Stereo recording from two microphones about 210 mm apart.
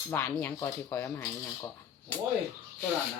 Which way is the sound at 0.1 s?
15° left (ahead or behind).